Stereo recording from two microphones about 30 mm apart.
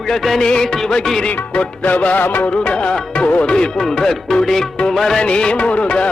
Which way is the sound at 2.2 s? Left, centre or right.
Left.